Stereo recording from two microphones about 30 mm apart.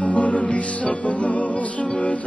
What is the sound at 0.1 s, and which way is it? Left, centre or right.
Music, left.